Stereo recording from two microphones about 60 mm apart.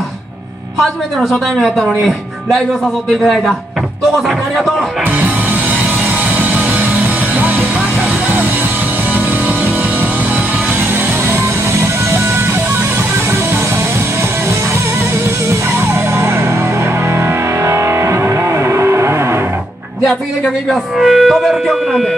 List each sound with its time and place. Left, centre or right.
1.3 s speech: centre
5.1 s music: right
9.1 s music: right
15.7 s music: right
20.0 s speech: centre